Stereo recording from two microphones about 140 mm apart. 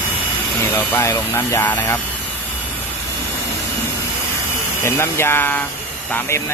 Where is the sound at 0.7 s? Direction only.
20° left (ahead or behind).